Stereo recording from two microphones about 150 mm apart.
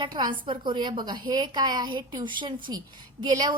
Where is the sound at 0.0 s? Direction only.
30° right (ahead or behind).